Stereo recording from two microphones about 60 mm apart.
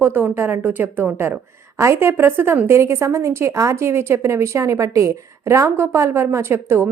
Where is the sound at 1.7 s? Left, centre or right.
Right.